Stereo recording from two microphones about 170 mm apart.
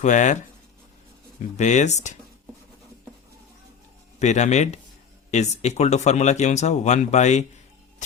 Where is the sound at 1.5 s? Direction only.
45° left (ahead or behind).